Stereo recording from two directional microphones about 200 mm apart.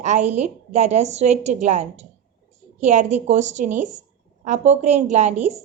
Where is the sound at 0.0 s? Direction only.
35° right (ahead or behind).